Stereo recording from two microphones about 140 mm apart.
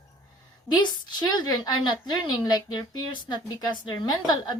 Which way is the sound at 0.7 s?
30° left (ahead or behind).